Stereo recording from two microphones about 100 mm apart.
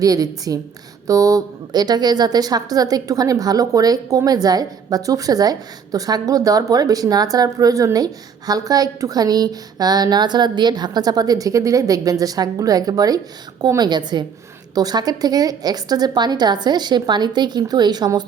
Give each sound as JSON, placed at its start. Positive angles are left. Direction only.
{"t": 0.0, "sound": "a woman's voice", "side_deg": -35}